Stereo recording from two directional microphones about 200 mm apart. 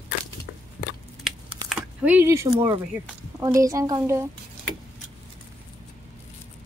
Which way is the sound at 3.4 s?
15° right (ahead or behind).